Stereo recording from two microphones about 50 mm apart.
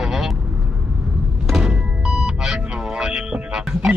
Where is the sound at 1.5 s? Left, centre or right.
Centre.